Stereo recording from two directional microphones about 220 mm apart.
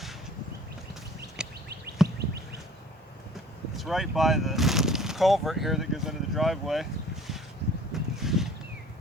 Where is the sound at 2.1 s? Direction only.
45° right (ahead or behind).